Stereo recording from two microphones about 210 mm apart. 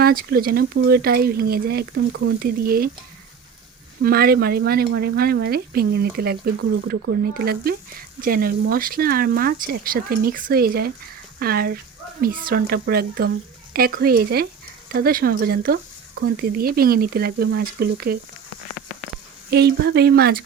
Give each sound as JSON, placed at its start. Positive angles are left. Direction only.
{"t": 0.0, "sound": "speech", "side_deg": -45}
{"t": 4.0, "sound": "speech", "side_deg": -45}
{"t": 19.5, "sound": "speech", "side_deg": -50}